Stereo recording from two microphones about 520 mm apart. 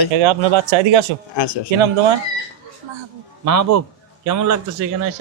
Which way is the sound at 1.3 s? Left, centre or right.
Left.